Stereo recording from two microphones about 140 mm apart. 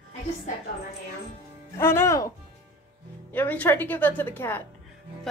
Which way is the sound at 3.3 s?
15° left (ahead or behind).